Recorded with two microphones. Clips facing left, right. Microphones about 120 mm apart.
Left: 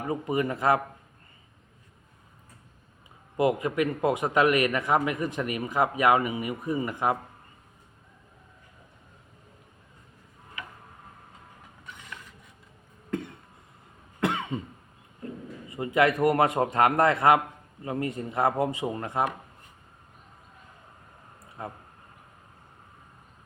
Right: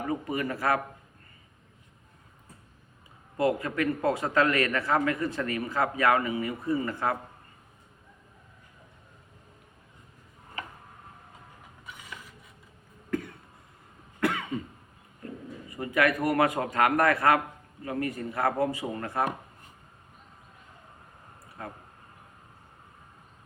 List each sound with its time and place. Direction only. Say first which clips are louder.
0.1 s a man's voice: left 5 dB; 20° left (ahead or behind)
3.3 s a man's voice: left 2 dB; 20° left (ahead or behind)
10.6 s a sound: right 2 dB; 40° right (ahead or behind)
13.1 s cough: right 1 dB; 25° left (ahead or behind)
15.7 s a man's voice: left 3 dB; 25° left (ahead or behind)
21.6 s a man's voice: left 2 dB; 20° left (ahead or behind)